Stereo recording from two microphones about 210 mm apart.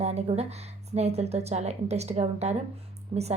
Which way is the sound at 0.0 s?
30° right (ahead or behind).